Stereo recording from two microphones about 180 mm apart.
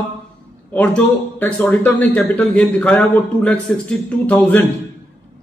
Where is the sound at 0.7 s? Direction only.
10° left (ahead or behind).